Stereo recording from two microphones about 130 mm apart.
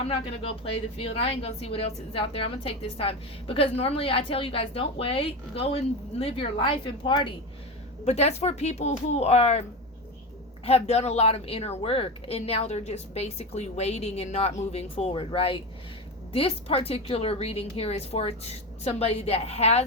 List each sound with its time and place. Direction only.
0.0 s a woman's voice: 45° left (ahead or behind)
8.0 s speech: 55° left (ahead or behind)
10.7 s a woman's voice: 55° left (ahead or behind)